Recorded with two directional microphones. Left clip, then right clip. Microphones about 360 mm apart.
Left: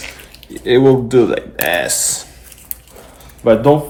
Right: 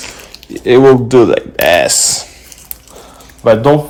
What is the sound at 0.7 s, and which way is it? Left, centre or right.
Speech, centre.